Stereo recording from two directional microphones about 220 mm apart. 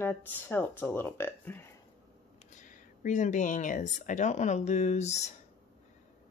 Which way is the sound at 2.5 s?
35° left (ahead or behind).